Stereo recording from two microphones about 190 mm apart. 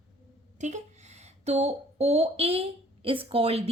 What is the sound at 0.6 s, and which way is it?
Speech, 40° right (ahead or behind).